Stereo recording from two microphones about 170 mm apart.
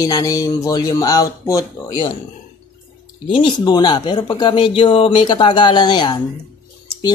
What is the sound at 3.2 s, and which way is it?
Speech, 25° left (ahead or behind).